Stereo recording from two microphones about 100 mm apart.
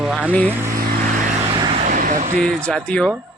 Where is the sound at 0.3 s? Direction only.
15° left (ahead or behind).